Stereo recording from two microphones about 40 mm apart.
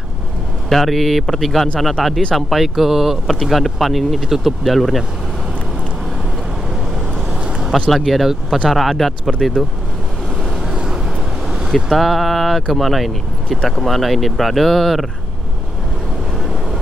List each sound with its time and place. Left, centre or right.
0.7 s speech: centre
7.9 s speech: centre
10.7 s a sound: centre
11.7 s speech: centre